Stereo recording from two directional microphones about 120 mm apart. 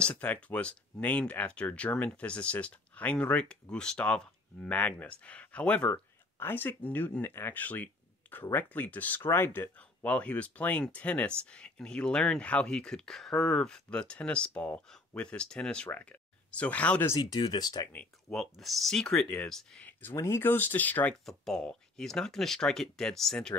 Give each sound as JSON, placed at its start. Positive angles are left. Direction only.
{"t": 0.0, "sound": "speech", "side_deg": 10}
{"t": 17.1, "sound": "speech", "side_deg": 35}
{"t": 17.9, "sound": "speech", "side_deg": 0}
{"t": 19.9, "sound": "speech", "side_deg": 15}